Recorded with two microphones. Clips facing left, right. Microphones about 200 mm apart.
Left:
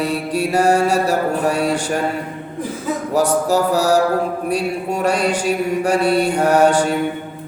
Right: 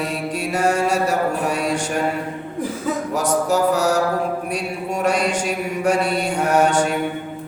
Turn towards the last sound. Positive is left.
turn(degrees=35)  # may be behind; listen again after turning